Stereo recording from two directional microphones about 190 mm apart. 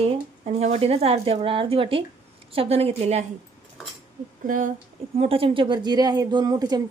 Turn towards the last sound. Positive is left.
turn(degrees=-20)  # may be behind; listen again after turning